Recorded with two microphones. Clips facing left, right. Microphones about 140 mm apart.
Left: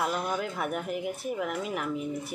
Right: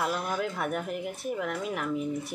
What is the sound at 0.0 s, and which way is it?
A woman's voice, centre (ahead or behind).